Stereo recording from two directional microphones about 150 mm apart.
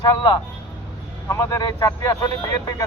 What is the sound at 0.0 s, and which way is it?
Speech, 25° left (ahead or behind).